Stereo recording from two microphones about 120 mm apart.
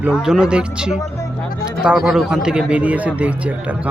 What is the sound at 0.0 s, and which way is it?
A man's voice, 5° right (ahead or behind).